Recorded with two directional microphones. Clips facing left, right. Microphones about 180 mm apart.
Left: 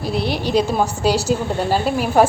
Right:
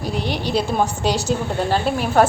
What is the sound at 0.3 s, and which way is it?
A woman's voice, 10° left (ahead or behind).